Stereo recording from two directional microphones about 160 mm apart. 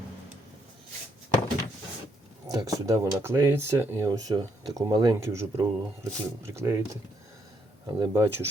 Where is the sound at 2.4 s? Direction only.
20° right (ahead or behind).